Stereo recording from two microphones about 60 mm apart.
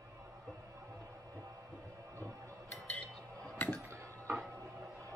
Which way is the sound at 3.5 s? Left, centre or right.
Left.